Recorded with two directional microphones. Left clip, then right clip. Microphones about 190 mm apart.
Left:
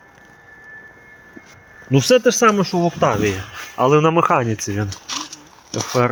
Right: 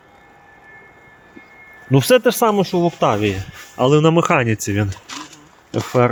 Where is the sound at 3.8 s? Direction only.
80° right.